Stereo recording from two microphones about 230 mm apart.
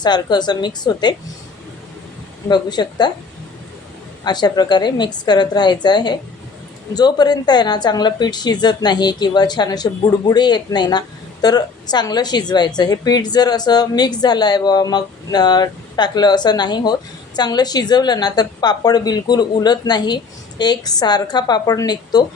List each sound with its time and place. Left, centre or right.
0.0 s a woman's voice: centre
2.5 s a woman's voice: centre
4.2 s a woman's voice: centre